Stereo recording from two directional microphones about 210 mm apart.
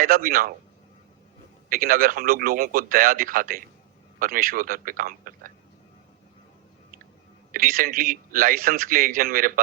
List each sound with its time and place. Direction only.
0.0 s a man's voice: 45° right (ahead or behind)
1.7 s a man's voice: 45° right (ahead or behind)
7.5 s a man's voice: 45° right (ahead or behind)